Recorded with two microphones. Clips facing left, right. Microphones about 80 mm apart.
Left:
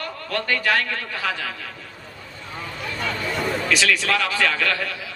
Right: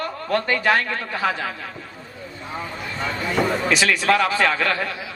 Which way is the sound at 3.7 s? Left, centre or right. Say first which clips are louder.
Right 1 dB; right.